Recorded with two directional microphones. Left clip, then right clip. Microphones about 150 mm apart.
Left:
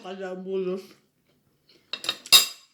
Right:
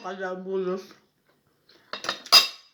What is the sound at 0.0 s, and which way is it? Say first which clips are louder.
Speech: right 3 dB; 15° left (ahead or behind).